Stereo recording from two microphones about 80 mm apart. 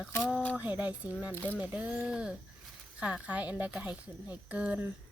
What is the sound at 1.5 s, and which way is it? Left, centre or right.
A woman's voice, centre.